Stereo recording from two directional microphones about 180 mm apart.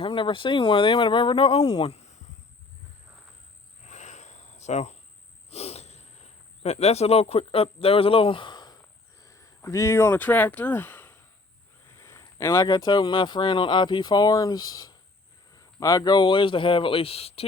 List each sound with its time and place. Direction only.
0.0 s speech: 30° left (ahead or behind)
3.8 s cricket: 40° left (ahead or behind)
5.5 s speech: 35° left (ahead or behind)